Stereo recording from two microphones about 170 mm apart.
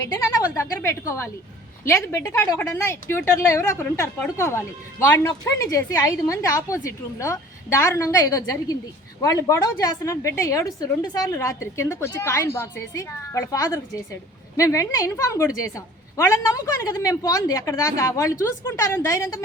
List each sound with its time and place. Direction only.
0.0 s a woman's voice: 15° left (ahead or behind)